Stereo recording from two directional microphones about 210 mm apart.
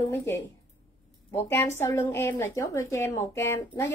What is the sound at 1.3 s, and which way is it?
A woman's voice, 10° left (ahead or behind).